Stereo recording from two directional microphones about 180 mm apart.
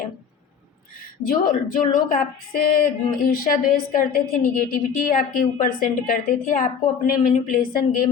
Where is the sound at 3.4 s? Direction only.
50° left (ahead or behind).